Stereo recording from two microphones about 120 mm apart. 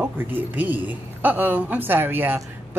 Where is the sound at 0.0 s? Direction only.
15° right (ahead or behind).